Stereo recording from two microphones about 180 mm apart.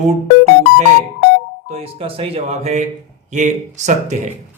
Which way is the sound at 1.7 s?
35° right (ahead or behind).